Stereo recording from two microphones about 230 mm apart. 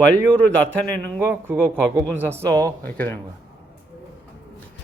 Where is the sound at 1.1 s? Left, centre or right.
Centre.